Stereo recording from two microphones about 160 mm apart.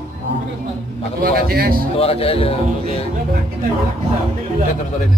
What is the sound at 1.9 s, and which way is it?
Speech, 35° left (ahead or behind).